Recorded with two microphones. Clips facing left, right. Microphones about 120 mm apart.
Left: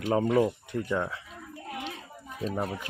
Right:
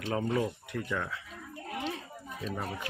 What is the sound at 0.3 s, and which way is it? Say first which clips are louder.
Speech: left 6 dB; 30° left (ahead or behind).